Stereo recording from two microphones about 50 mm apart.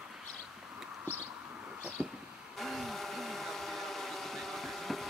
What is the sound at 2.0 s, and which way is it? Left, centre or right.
Music, right.